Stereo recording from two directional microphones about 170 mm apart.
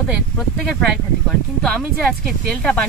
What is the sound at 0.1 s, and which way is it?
Speech, centre (ahead or behind).